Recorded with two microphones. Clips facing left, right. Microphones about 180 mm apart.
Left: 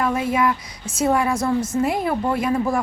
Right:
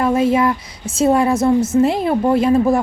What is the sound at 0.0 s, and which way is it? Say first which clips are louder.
A woman's voice: right 5 dB; 25° right (ahead or behind).